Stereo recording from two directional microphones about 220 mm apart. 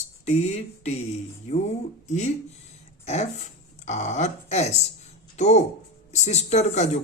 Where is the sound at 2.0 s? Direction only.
30° left (ahead or behind).